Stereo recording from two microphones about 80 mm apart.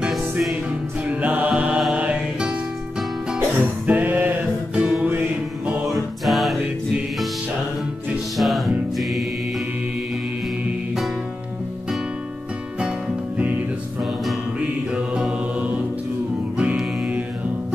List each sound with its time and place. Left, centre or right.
0.1 s music: centre
0.7 s music: centre
1.8 s mantra: centre
3.3 s music: right
4.7 s music: centre
5.9 s music: centre
8.4 s music: centre
14.9 s mantra: centre
16.5 s music: centre